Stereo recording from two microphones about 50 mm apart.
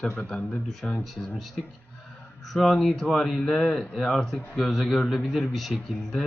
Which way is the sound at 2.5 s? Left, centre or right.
Centre.